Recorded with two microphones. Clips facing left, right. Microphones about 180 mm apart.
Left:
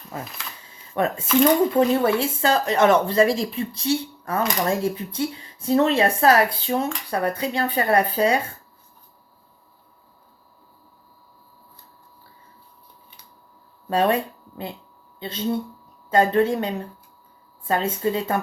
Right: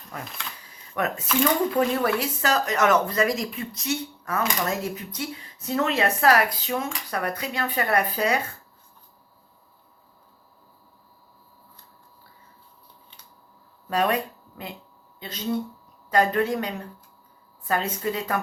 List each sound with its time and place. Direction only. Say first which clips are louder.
0.6 s camera: left 4 dB; 25° left (ahead or behind)
2.0 s speech: left 4 dB; 25° left (ahead or behind)
13.8 s speech: left 3 dB; 30° left (ahead or behind)